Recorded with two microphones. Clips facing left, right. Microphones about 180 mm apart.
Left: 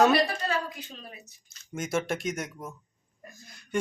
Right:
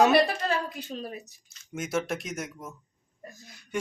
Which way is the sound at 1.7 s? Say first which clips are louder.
Even; 5° right (ahead or behind).